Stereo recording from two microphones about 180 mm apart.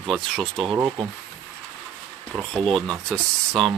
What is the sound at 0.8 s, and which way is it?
Speech, 25° right (ahead or behind).